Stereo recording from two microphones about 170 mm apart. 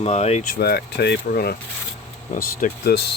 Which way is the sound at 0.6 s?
70° left (ahead or behind).